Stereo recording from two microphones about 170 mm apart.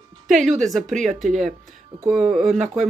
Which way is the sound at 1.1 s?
45° right (ahead or behind).